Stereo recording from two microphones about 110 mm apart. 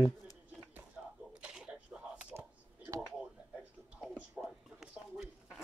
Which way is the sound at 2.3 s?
20° right (ahead or behind).